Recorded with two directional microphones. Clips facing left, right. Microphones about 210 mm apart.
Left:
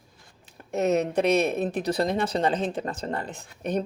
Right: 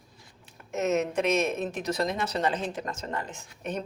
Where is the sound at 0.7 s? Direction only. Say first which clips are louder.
Left 3 dB; 35° left (ahead or behind).